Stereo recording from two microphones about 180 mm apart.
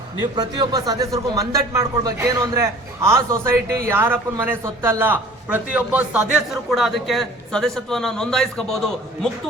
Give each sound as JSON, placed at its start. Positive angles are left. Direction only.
{"t": 0.2, "sound": "a man's voice", "side_deg": -20}